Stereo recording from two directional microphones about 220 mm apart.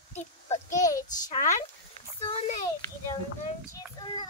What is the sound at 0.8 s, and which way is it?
Child singing, 15° left (ahead or behind).